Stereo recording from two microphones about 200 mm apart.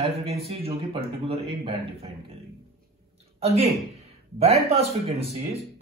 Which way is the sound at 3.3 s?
30° right (ahead or behind).